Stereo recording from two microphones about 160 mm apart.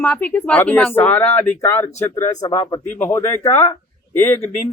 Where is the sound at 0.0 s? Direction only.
10° left (ahead or behind).